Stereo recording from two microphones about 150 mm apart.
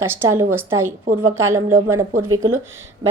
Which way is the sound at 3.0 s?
25° right (ahead or behind).